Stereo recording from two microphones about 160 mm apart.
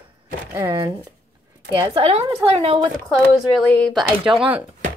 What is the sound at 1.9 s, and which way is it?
Speech, 35° right (ahead or behind).